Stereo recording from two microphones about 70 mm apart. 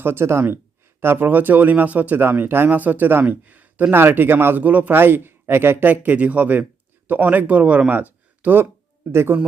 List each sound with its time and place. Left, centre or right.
0.0 s a man's voice: right
7.9 s a sound: right
9.1 s speech: right